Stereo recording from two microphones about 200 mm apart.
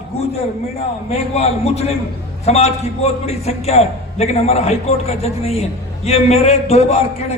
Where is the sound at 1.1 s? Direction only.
30° left (ahead or behind).